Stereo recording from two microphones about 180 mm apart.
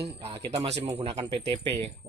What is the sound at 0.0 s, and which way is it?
Speech, 30° right (ahead or behind).